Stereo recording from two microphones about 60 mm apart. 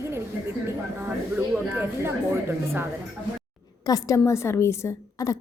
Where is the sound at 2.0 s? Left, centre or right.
Right.